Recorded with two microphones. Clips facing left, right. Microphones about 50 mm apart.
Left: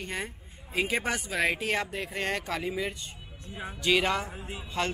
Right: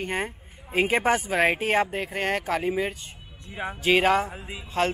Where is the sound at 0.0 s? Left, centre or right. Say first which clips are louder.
Right 6 dB; right; by 2.6 s centre.